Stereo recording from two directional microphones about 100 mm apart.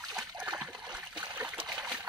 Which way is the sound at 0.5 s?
10° right (ahead or behind).